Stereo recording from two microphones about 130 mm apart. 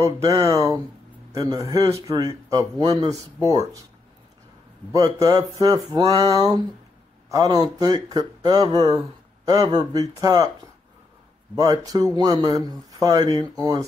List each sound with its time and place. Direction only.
0.0 s speech: 25° right (ahead or behind)
4.9 s speech: 30° right (ahead or behind)
11.5 s speech: 30° right (ahead or behind)